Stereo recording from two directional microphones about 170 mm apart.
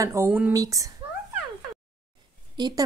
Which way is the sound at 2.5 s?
25° right (ahead or behind).